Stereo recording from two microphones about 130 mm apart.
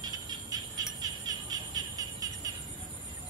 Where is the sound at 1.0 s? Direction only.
30° right (ahead or behind).